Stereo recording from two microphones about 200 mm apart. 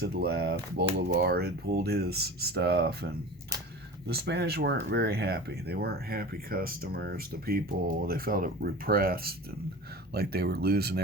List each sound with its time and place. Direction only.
0.0 s speech: 50° right (ahead or behind)